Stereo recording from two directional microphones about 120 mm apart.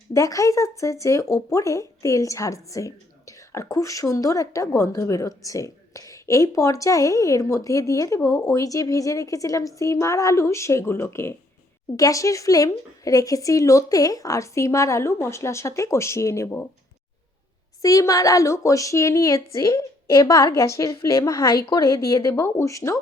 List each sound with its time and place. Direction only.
0.1 s speech: 25° left (ahead or behind)
17.8 s speech: 25° left (ahead or behind)